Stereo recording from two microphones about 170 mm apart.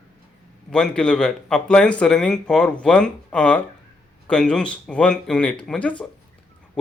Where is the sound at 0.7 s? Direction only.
5° left (ahead or behind).